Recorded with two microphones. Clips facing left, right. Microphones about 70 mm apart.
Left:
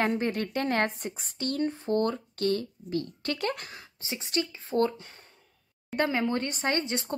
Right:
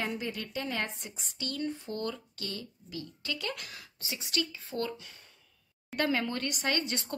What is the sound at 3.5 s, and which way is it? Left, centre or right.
Speech, left.